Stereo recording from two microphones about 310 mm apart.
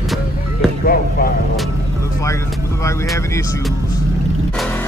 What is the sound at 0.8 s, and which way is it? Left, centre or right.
Music, left.